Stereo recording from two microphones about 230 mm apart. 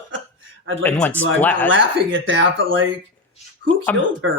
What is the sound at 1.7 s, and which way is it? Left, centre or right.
Speech, right.